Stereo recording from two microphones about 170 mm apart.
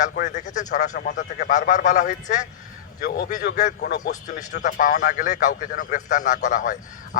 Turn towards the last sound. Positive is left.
turn(degrees=50)  # may be behind; listen again after turning